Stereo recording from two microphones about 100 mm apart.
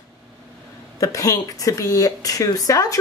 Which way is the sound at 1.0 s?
35° left (ahead or behind).